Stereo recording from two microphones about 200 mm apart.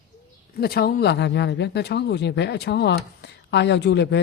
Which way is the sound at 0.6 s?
50° left (ahead or behind).